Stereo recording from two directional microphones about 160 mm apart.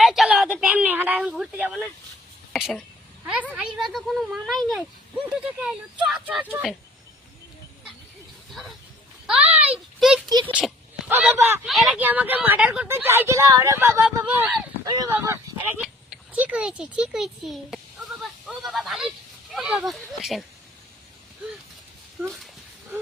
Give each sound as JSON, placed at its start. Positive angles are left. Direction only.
{"t": 0.0, "sound": "a sound", "side_deg": 0}
{"t": 0.6, "sound": "speech", "side_deg": -10}
{"t": 8.4, "sound": "speech", "side_deg": 0}
{"t": 14.8, "sound": "speech", "side_deg": -20}
{"t": 15.8, "sound": "a child's voice", "side_deg": -5}